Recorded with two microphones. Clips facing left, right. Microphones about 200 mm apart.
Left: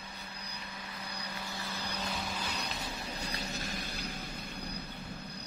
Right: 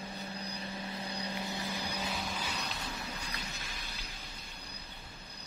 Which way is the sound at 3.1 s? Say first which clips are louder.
Left 5 dB; 40° left (ahead or behind).